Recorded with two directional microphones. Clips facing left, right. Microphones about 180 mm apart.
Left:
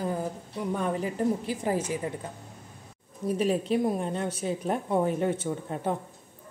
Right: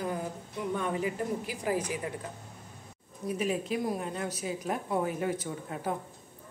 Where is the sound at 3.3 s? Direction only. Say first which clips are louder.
Left 5 dB; 30° left (ahead or behind).